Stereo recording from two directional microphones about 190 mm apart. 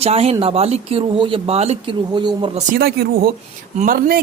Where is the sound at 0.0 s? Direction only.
30° right (ahead or behind).